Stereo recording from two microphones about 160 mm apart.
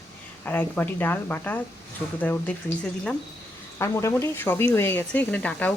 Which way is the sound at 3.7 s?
15° left (ahead or behind).